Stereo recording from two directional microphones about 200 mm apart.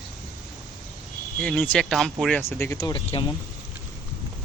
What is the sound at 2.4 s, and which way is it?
Speech, 10° left (ahead or behind).